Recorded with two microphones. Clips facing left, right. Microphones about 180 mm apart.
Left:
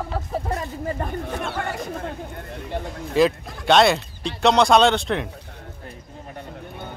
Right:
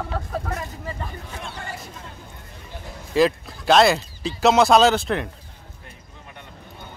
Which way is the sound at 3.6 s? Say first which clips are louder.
Even; centre (ahead or behind).